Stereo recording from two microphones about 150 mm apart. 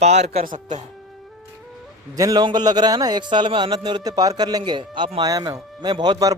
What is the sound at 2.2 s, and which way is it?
A man's voice, 25° right (ahead or behind).